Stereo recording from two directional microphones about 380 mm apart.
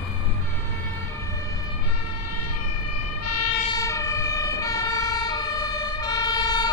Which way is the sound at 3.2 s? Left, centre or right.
Left.